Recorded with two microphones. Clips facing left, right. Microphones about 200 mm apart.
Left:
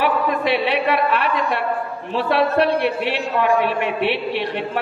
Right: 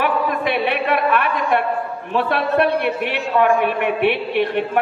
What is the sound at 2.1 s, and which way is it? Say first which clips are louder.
A man's voice: even; 50° right (ahead or behind).